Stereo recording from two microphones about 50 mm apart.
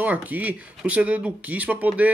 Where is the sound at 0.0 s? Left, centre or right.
Right.